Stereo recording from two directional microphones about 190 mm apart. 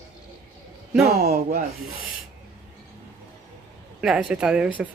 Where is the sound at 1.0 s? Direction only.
55° right (ahead or behind).